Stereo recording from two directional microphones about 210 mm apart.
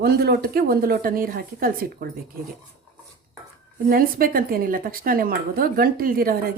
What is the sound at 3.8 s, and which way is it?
Speech, 45° right (ahead or behind).